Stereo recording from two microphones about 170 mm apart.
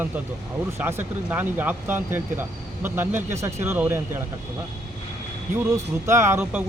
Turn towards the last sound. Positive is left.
turn(degrees=-10)  # may be behind; listen again after turning